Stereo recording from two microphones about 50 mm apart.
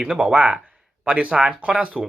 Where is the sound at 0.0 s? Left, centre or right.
Centre.